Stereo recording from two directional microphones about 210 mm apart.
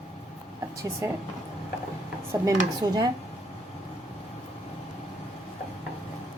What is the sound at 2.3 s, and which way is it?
Speech, 15° right (ahead or behind).